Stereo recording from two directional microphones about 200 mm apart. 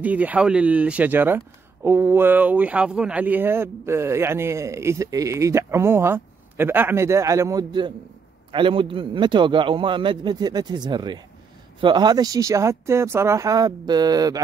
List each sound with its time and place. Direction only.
0.0 s a man's voice: 5° right (ahead or behind)